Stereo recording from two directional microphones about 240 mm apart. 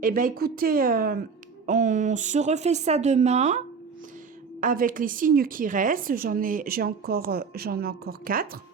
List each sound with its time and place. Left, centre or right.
0.0 s a woman's voice: right
4.6 s a woman's voice: right